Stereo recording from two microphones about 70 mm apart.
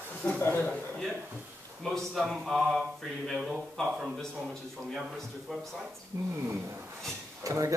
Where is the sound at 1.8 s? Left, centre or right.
Centre.